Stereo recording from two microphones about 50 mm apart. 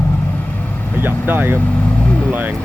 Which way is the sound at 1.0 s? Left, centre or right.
Right.